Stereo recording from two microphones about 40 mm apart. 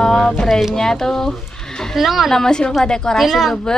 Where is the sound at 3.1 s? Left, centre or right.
Centre.